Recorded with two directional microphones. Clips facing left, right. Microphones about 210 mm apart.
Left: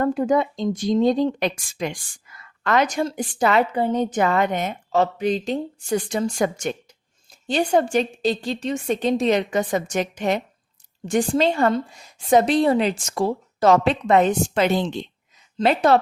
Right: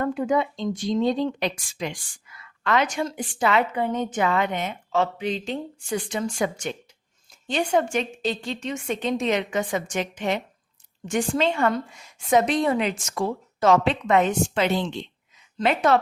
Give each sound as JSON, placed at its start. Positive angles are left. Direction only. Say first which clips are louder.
{"t": 0.0, "sound": "speech", "louder": "left 3 dB", "side_deg": 40}